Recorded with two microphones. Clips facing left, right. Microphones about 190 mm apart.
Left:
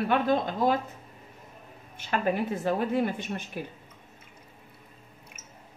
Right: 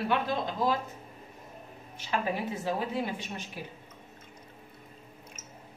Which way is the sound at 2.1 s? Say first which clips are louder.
Left 4 dB; 55° left (ahead or behind).